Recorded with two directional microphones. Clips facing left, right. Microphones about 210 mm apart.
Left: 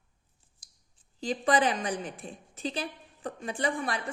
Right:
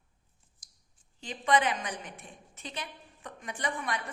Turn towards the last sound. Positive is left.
turn(degrees=30)  # may be behind; listen again after turning